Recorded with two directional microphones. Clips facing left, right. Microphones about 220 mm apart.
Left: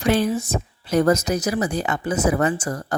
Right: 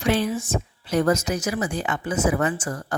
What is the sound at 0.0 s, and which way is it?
Speech, 40° left (ahead or behind).